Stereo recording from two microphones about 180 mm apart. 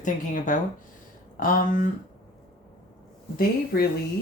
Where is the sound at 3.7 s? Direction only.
55° left (ahead or behind).